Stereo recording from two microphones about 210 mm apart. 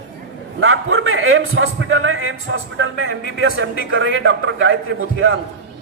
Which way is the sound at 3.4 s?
75° right (ahead or behind).